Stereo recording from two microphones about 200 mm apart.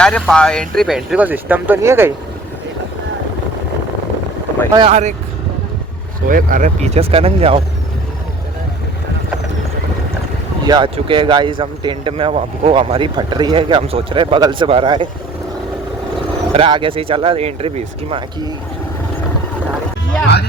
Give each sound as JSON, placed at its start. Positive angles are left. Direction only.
{"t": 0.0, "sound": "speech", "side_deg": 5}
{"t": 4.9, "sound": "speech", "side_deg": -35}
{"t": 6.2, "sound": "speech", "side_deg": -45}
{"t": 10.6, "sound": "speech", "side_deg": -20}
{"t": 16.5, "sound": "speech", "side_deg": -25}